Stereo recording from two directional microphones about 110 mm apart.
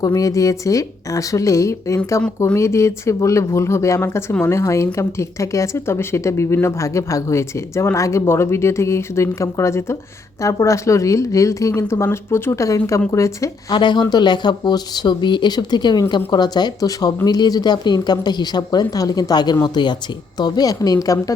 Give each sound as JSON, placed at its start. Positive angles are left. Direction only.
{"t": 0.0, "sound": "speech", "side_deg": 30}
{"t": 13.7, "sound": "speech", "side_deg": 45}